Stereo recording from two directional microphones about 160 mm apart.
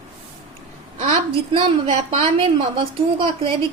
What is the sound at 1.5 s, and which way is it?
A woman's voice, 30° right (ahead or behind).